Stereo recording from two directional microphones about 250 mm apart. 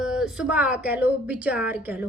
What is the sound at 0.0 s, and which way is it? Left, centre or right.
Speech, centre.